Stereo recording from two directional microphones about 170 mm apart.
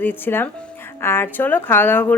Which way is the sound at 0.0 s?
10° left (ahead or behind).